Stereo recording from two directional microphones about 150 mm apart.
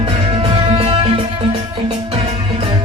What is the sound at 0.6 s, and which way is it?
Music, 40° right (ahead or behind).